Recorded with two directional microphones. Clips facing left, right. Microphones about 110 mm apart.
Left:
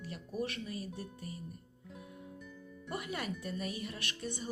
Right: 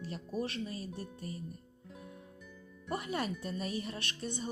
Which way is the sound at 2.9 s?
30° right (ahead or behind).